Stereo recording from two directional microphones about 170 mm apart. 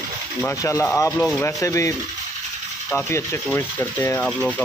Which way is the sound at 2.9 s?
15° left (ahead or behind).